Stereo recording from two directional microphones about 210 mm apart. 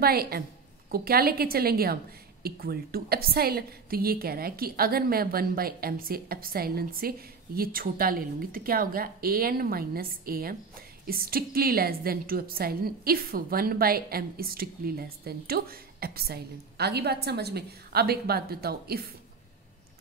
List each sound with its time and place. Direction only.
0.0 s a woman's voice: 45° right (ahead or behind)